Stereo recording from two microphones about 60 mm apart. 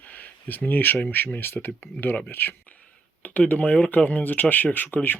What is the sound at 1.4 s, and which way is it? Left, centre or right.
Speech, left.